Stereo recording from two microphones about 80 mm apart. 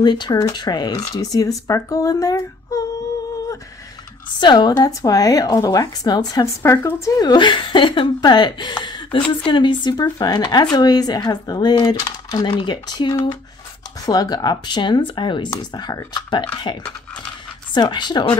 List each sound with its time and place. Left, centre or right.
0.0 s speech: left
4.4 s speech: left
6.4 s speech: left
7.2 s speech: left
14.0 s speech: left
15.7 s speech: left